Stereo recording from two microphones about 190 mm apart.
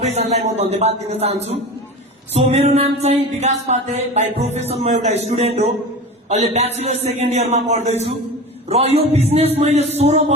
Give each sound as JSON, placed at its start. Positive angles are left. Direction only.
{"t": 0.0, "sound": "music", "side_deg": -35}